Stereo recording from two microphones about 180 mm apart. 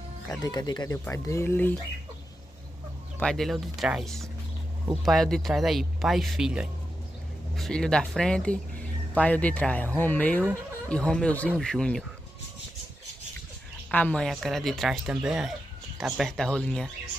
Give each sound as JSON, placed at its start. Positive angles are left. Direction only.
{"t": 0.4, "sound": "speech", "side_deg": 25}
{"t": 3.2, "sound": "speech", "side_deg": 5}
{"t": 13.8, "sound": "speech", "side_deg": 5}